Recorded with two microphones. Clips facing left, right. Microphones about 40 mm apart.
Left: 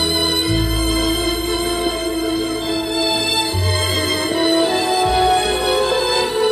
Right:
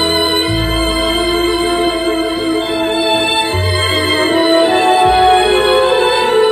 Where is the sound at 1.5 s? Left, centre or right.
Right.